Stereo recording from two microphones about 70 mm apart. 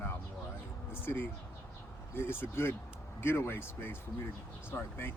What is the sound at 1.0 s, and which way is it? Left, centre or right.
Speech, left.